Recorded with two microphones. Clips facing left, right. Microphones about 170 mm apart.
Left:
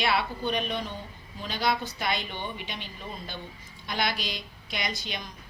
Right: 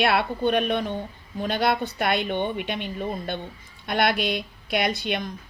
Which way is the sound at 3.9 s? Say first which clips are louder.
Right 8 dB; 60° right (ahead or behind).